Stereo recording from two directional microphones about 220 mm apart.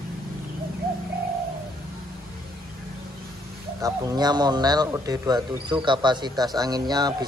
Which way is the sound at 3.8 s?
15° right (ahead or behind).